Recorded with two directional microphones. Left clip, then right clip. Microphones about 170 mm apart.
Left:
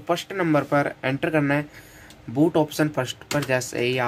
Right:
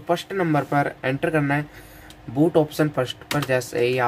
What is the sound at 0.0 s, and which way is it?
Speech, 10° left (ahead or behind).